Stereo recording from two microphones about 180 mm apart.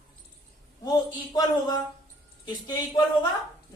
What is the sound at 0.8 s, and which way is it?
Speech, 20° left (ahead or behind).